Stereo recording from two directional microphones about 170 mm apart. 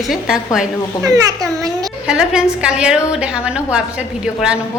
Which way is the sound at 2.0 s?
5° right (ahead or behind).